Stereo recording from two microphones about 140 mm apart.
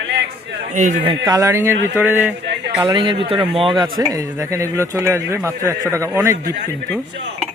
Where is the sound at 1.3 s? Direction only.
20° right (ahead or behind).